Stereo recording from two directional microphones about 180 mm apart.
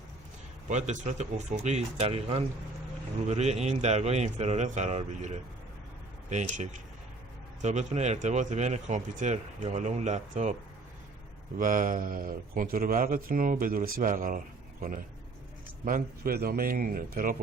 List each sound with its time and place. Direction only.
0.7 s speech: 40° right (ahead or behind)
11.5 s speech: 50° right (ahead or behind)